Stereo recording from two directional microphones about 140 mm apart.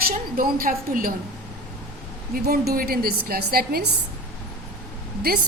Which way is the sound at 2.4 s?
90° right.